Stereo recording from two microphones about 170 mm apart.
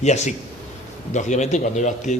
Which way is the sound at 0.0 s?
40° left (ahead or behind).